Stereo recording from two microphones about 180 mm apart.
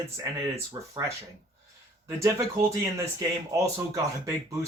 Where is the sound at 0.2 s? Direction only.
15° right (ahead or behind).